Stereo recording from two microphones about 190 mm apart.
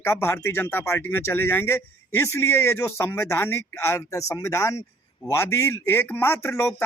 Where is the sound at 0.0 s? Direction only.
15° left (ahead or behind).